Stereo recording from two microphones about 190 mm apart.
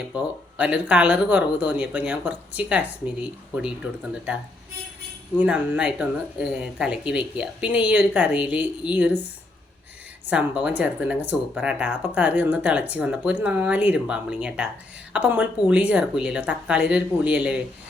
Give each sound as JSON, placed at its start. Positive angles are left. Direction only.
{"t": 0.1, "sound": "speech", "side_deg": -5}
{"t": 5.4, "sound": "speech", "side_deg": -5}
{"t": 10.2, "sound": "a woman's voice", "side_deg": -5}